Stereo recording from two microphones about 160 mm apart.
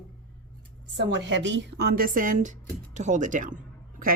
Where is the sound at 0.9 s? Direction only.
90° right; by 3.6 s 55° right (ahead or behind).